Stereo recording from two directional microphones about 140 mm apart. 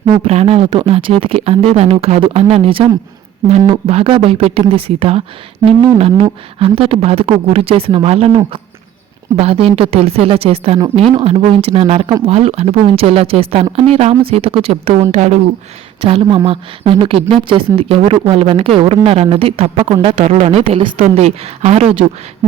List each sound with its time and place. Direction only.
0.0 s speech: 45° right (ahead or behind)
9.3 s speech: 45° right (ahead or behind)
15.1 s speech: 55° right (ahead or behind)
16.0 s speech: 40° right (ahead or behind)
21.0 s speech: 50° right (ahead or behind)